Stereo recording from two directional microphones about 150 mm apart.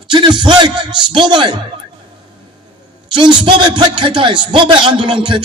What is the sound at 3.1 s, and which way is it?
A man's voice, 30° right (ahead or behind).